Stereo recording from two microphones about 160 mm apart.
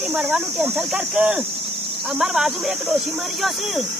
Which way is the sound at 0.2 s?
5° right (ahead or behind).